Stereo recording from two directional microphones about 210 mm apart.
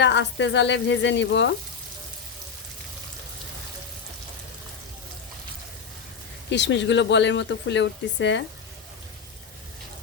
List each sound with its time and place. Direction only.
0.0 s speech: 55° left (ahead or behind)
6.5 s speech: 60° left (ahead or behind)